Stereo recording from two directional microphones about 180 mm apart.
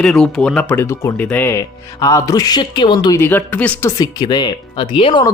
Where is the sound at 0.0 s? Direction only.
5° left (ahead or behind); by 3.2 s 25° left (ahead or behind).